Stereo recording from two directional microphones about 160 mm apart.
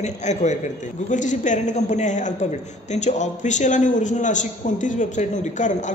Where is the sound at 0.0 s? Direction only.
45° left (ahead or behind).